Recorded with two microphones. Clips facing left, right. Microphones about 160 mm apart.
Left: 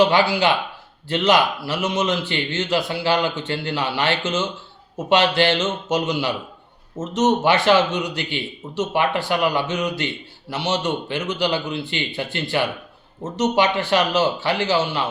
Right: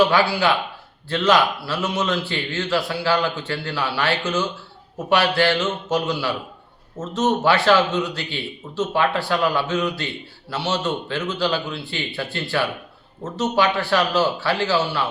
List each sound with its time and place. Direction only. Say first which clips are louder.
0.0 s a man's voice: left 1 dB; 20° left (ahead or behind)